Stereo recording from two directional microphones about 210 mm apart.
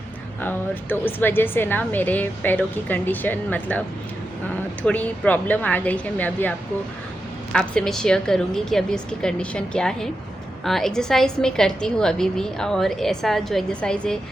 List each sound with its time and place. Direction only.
0.4 s a woman's voice: 10° left (ahead or behind)
7.5 s a woman's voice: 5° left (ahead or behind)